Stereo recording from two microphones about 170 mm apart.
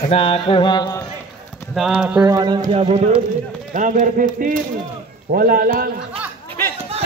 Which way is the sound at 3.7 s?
50° right (ahead or behind).